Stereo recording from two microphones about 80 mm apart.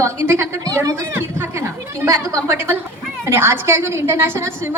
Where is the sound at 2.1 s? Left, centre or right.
Right.